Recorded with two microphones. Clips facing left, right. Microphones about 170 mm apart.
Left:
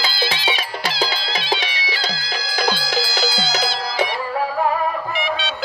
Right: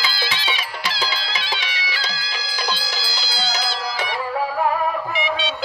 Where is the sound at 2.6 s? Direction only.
50° left (ahead or behind).